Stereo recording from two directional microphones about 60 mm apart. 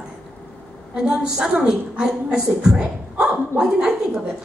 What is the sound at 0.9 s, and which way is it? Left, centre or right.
A woman's voice, centre.